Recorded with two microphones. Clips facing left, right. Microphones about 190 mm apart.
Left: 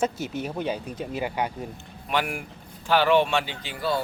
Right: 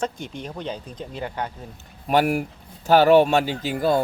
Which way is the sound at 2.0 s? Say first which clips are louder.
Right 8 dB; 40° right (ahead or behind).